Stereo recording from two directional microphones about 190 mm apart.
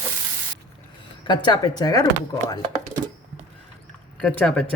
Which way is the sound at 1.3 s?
25° left (ahead or behind).